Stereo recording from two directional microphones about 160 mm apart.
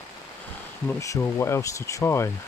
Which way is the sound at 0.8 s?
20° left (ahead or behind).